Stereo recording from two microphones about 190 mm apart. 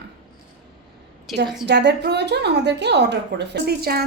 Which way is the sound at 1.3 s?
Centre (ahead or behind).